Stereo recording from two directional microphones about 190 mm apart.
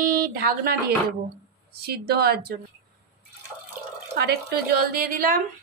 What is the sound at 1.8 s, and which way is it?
Speech, 55° right (ahead or behind).